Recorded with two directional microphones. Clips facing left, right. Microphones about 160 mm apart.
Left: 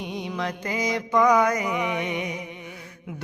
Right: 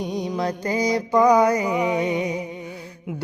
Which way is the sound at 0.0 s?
40° right (ahead or behind).